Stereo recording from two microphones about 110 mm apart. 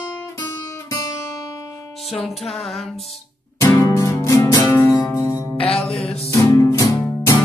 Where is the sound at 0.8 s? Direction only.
25° left (ahead or behind).